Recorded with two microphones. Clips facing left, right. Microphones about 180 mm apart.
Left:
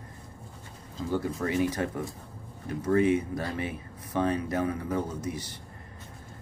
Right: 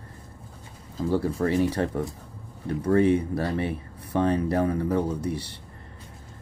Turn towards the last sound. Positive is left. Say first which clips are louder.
# right 5 dB
turn(degrees=-30)  # may be behind; listen again after turning